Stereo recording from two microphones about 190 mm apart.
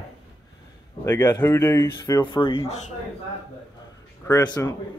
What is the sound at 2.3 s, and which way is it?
Speech, 25° left (ahead or behind).